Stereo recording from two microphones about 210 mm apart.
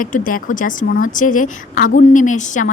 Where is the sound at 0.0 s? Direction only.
40° left (ahead or behind).